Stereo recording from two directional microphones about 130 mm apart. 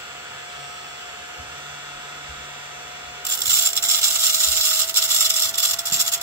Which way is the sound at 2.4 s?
15° right (ahead or behind).